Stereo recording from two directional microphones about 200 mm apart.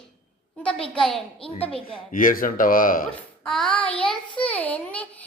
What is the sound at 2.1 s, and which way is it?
Speech, 40° left (ahead or behind).